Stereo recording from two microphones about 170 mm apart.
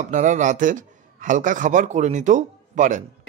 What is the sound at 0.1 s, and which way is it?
Speech, 45° right (ahead or behind).